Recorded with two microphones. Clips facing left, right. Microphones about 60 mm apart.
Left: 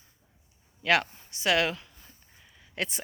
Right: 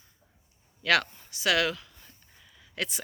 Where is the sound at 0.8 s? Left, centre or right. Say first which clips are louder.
Even; left.